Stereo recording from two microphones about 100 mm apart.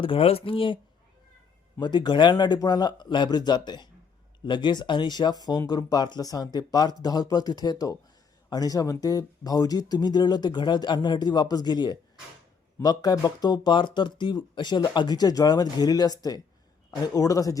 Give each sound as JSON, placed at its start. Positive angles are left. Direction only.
{"t": 0.0, "sound": "speech", "side_deg": 65}
{"t": 1.8, "sound": "speech", "side_deg": 50}